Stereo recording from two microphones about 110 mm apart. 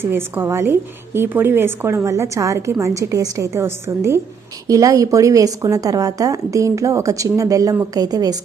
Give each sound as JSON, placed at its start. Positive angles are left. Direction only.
{"t": 0.0, "sound": "a woman's voice", "side_deg": -20}